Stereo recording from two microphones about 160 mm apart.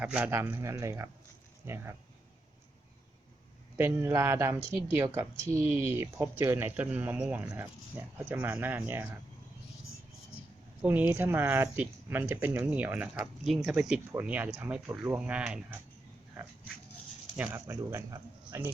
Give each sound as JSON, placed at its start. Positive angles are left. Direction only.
{"t": 0.0, "sound": "speech", "side_deg": -10}
{"t": 3.8, "sound": "speech", "side_deg": -15}
{"t": 10.8, "sound": "speech", "side_deg": -10}